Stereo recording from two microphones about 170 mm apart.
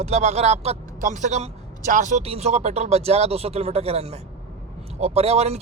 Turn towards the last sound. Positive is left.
turn(degrees=-40)  # may be behind; listen again after turning